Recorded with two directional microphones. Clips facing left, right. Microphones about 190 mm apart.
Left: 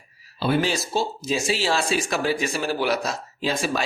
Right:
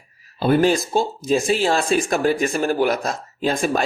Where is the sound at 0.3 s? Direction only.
50° right (ahead or behind).